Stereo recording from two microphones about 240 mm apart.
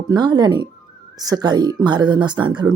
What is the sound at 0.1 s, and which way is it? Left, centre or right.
Speech, centre.